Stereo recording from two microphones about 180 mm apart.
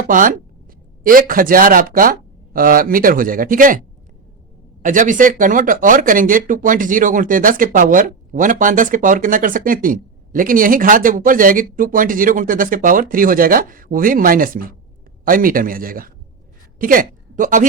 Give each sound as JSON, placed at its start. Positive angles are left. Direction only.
{"t": 0.1, "sound": "speech", "side_deg": -50}
{"t": 4.8, "sound": "a woman's voice", "side_deg": -45}